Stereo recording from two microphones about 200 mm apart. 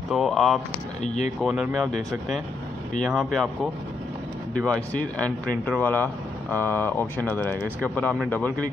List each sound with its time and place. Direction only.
0.1 s speech: centre (ahead or behind)
1.0 s speech: 35° left (ahead or behind)
1.4 s speech: 5° right (ahead or behind)
4.6 s speech: 5° left (ahead or behind)